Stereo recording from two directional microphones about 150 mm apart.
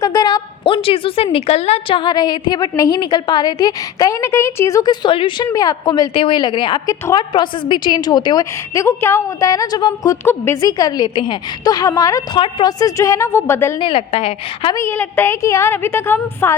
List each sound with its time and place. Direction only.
0.0 s a woman's voice: 25° left (ahead or behind)
6.8 s a woman's voice: 20° left (ahead or behind)
13.7 s a woman's voice: 35° left (ahead or behind)
14.8 s a woman's voice: 15° left (ahead or behind)